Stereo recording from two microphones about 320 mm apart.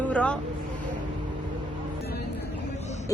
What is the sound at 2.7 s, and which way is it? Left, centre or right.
Vehicle, left.